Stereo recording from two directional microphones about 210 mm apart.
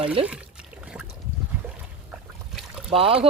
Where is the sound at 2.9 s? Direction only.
25° right (ahead or behind).